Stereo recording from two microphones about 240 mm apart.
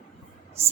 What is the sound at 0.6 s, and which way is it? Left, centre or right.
Speech, right.